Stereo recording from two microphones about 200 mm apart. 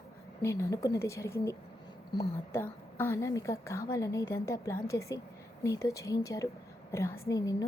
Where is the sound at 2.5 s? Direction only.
10° left (ahead or behind).